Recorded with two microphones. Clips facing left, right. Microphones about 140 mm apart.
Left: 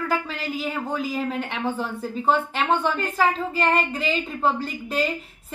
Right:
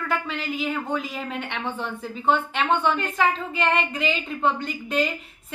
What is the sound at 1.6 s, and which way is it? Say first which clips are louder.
A woman's voice: left 3 dB; 35° left (ahead or behind).